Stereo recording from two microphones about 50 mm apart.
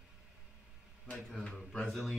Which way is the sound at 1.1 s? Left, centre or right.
Centre.